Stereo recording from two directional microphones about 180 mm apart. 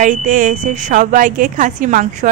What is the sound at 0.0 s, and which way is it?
A woman's voice, 45° right (ahead or behind).